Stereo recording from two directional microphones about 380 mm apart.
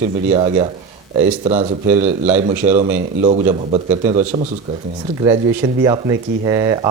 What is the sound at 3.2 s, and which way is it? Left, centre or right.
Speech, centre.